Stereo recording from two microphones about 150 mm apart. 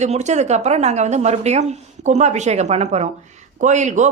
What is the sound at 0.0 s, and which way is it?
A woman's voice, 50° right (ahead or behind).